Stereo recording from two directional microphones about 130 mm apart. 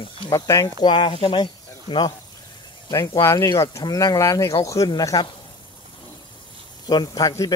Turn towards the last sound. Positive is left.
turn(degrees=30)  # may be behind; listen again after turning